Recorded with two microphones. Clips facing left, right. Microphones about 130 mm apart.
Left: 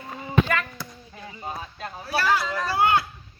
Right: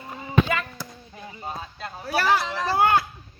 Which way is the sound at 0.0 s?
10° right (ahead or behind).